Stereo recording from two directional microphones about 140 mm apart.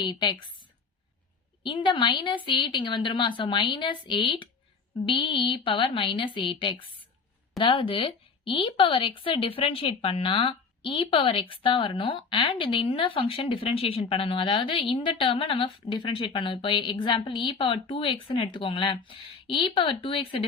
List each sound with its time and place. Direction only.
0.0 s speech: 35° left (ahead or behind)
1.6 s speech: 35° left (ahead or behind)